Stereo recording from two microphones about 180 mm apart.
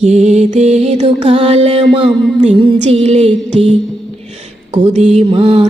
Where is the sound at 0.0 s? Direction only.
40° right (ahead or behind).